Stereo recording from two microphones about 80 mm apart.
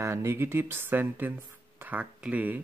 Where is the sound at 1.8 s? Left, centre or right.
Right.